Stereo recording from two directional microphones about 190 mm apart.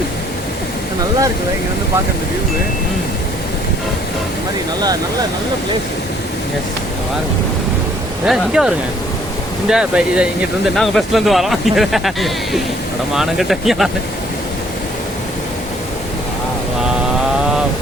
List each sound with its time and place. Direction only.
8.2 s speech: 5° right (ahead or behind)